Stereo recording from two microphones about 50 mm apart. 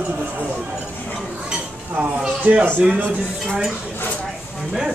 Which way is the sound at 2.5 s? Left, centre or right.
Right.